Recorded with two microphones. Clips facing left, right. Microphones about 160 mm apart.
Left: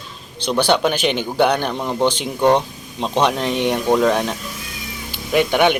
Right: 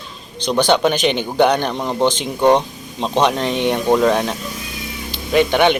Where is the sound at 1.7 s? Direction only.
15° right (ahead or behind).